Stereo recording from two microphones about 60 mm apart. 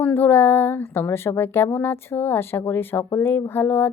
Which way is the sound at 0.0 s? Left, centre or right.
Left.